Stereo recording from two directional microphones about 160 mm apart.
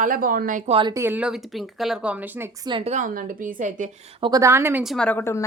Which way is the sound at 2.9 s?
60° right (ahead or behind).